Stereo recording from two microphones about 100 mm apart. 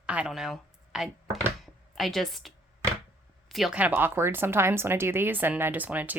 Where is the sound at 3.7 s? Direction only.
20° right (ahead or behind).